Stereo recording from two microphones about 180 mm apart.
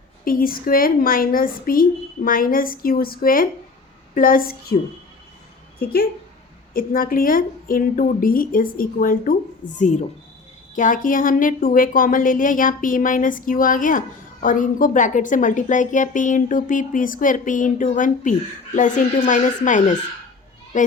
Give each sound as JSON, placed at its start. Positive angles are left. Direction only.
{"t": 0.3, "sound": "a woman's voice", "side_deg": 55}
{"t": 5.8, "sound": "a woman's voice", "side_deg": 55}